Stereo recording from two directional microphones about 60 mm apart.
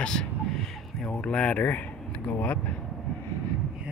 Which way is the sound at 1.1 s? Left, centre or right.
Centre.